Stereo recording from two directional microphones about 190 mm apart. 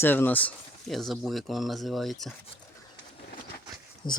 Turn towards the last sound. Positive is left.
turn(degrees=25)  # may be behind; listen again after turning